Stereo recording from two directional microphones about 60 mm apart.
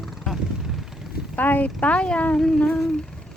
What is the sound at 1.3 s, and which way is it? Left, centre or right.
Speech, left.